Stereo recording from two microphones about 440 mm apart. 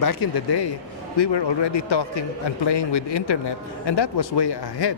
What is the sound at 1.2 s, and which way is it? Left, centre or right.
A man's voice, left.